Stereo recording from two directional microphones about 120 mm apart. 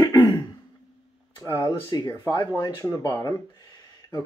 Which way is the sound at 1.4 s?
25° left (ahead or behind).